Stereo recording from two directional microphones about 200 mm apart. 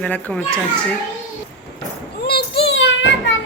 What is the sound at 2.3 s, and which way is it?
Child singing, 50° left (ahead or behind).